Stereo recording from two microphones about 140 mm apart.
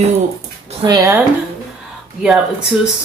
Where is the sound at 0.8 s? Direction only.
25° right (ahead or behind).